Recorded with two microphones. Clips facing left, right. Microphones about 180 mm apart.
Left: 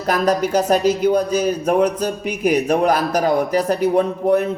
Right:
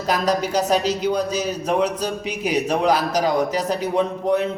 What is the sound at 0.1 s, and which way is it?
Speech, 50° left (ahead or behind).